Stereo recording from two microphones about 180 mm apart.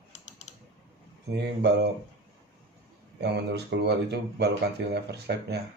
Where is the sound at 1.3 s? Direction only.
70° right (ahead or behind).